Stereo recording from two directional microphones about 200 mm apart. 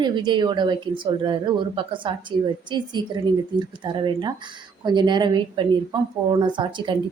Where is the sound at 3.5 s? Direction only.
20° right (ahead or behind).